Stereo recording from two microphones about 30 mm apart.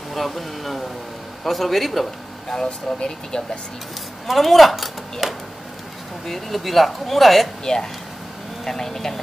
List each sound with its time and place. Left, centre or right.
0.1 s speech: centre
2.5 s speech: left
4.3 s speech: centre
5.2 s a sound: centre
6.2 s speech: centre
7.6 s speech: centre